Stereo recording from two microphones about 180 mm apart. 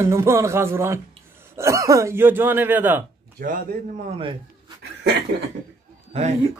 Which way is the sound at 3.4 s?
45° right (ahead or behind).